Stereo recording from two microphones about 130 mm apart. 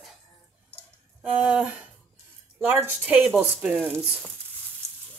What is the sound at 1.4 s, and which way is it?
Speech, 10° right (ahead or behind).